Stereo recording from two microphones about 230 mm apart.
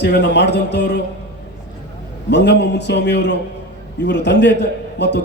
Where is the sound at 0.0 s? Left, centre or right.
Left.